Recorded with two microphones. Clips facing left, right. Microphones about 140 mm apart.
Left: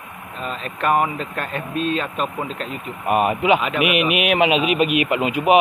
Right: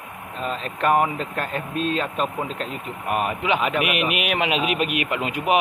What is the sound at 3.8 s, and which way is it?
A man's voice, 5° left (ahead or behind).